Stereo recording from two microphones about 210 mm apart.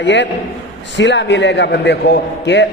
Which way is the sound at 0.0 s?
55° left (ahead or behind).